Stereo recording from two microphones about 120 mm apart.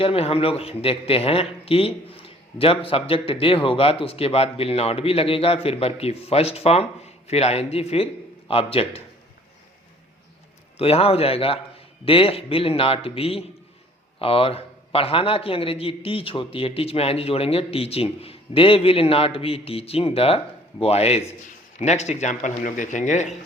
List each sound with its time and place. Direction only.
0.0 s a man's voice: 55° left (ahead or behind)
10.8 s a man's voice: 55° left (ahead or behind)
21.8 s speech: 70° left (ahead or behind); by 23.3 s 90° left